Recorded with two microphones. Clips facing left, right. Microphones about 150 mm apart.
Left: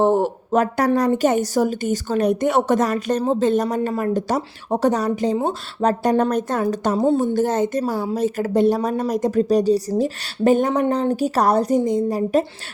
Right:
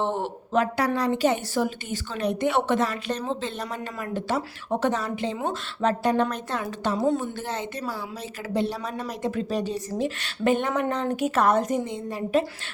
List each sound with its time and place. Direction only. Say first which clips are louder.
0.0 s a woman's voice: left 10 dB; 40° left (ahead or behind)
7.0 s a woman's voice: left 6 dB; 30° left (ahead or behind)
7.3 s a woman's voice: left 12 dB; 45° left (ahead or behind)